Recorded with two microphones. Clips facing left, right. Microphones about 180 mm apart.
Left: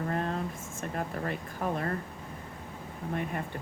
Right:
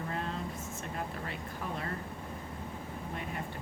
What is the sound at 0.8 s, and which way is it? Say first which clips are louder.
Speech: left 8 dB; 50° left (ahead or behind).